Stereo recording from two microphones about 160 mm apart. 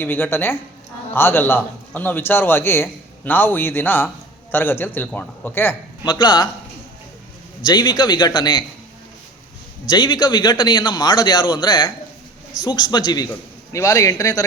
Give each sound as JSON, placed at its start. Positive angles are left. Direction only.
{"t": 0.0, "sound": "a man's voice", "side_deg": 15}
{"t": 6.1, "sound": "a man's voice", "side_deg": 25}
{"t": 7.6, "sound": "a man's voice", "side_deg": 25}
{"t": 9.9, "sound": "a man's voice", "side_deg": 25}